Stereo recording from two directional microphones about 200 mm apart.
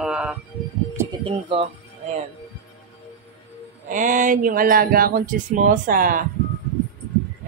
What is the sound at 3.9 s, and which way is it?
Speech, 40° right (ahead or behind).